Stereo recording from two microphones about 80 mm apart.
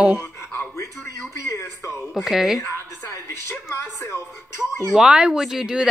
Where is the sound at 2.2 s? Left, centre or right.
Centre.